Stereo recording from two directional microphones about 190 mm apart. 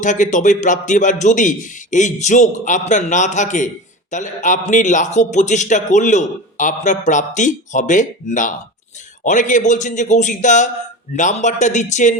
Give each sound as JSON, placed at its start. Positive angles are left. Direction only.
{"t": 0.0, "sound": "a man's voice", "side_deg": 40}